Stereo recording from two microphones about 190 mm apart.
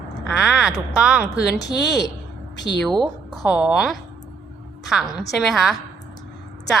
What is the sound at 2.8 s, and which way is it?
A woman's voice, centre (ahead or behind).